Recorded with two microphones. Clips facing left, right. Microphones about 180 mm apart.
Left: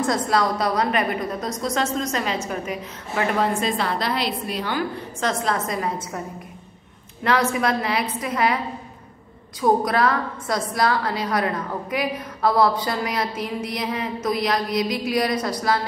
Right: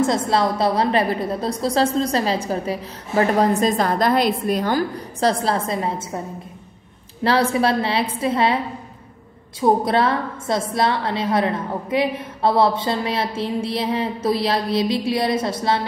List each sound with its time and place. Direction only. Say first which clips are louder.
0.0 s a woman's voice: right 3 dB; 25° right (ahead or behind)
7.2 s a woman's voice: right 3 dB; 30° right (ahead or behind)
9.6 s a woman's voice: right 2 dB; 25° right (ahead or behind)